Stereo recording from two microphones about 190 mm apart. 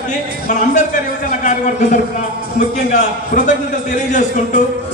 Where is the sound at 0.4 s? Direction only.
40° left (ahead or behind).